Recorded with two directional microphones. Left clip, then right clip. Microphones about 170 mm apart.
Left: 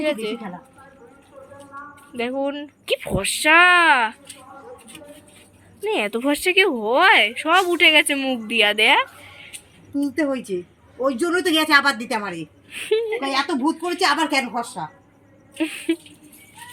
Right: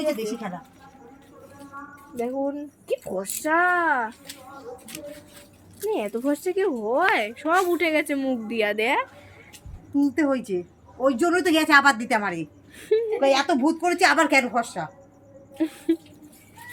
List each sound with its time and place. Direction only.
2.1 s speech: 30° left (ahead or behind)
5.8 s speech: 15° left (ahead or behind)
7.1 s a woman's voice: 5° left (ahead or behind)
9.5 s music: 5° right (ahead or behind)
10.2 s a woman's voice: 30° right (ahead or behind)
12.7 s a woman's voice: 5° right (ahead or behind)
13.9 s a woman's voice: 30° right (ahead or behind)
15.5 s a woman's voice: centre (ahead or behind)